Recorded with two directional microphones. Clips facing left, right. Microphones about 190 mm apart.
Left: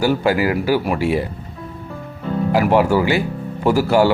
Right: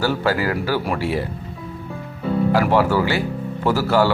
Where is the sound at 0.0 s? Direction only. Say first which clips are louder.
Left 3 dB; 15° left (ahead or behind).